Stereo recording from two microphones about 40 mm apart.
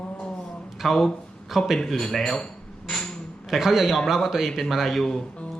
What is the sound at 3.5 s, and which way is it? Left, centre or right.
A man's voice, centre.